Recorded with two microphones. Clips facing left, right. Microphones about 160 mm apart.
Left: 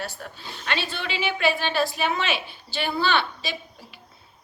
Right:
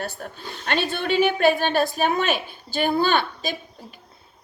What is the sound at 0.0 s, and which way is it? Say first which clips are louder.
A woman's voice: right 3 dB; 50° right (ahead or behind).